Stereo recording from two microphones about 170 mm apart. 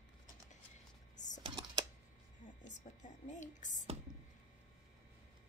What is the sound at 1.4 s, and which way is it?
Computer keyboard, 25° right (ahead or behind).